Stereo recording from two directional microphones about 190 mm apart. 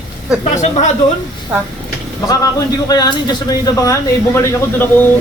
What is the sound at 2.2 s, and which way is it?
Speech, 20° left (ahead or behind).